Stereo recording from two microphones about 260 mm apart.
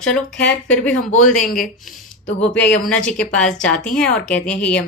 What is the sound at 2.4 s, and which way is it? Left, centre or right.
Speech, centre.